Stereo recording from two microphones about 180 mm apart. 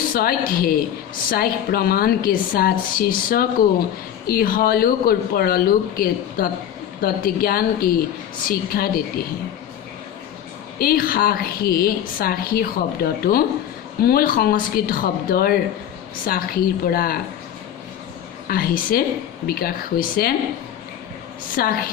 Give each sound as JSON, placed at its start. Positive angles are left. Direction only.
{"t": 0.1, "sound": "a woman's voice", "side_deg": 55}
{"t": 10.8, "sound": "a woman's voice", "side_deg": 55}
{"t": 18.4, "sound": "a woman's voice", "side_deg": 55}
{"t": 21.5, "sound": "a woman's voice", "side_deg": 55}